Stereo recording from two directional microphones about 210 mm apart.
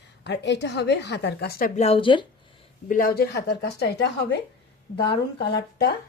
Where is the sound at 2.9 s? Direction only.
45° left (ahead or behind).